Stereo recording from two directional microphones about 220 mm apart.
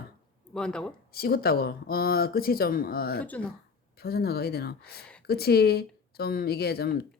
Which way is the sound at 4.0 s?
45° left (ahead or behind).